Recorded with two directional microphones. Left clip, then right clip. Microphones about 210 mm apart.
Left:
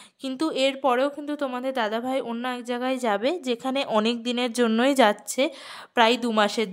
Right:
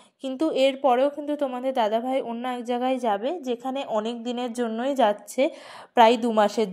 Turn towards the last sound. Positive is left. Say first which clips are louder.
# right 1 dB
turn(degrees=5)  # may be behind; listen again after turning